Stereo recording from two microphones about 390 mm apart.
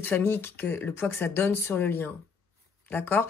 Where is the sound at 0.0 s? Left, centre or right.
Centre.